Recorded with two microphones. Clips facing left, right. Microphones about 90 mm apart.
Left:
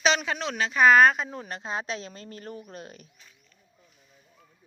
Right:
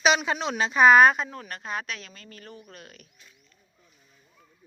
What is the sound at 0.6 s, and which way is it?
Speech, 20° right (ahead or behind).